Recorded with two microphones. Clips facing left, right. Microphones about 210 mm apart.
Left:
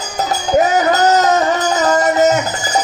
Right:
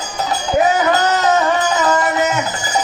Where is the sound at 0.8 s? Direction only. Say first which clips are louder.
Left 3 dB; 40° left (ahead or behind).